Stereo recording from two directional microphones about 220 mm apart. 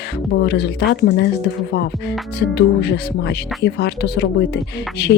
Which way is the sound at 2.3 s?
50° left (ahead or behind).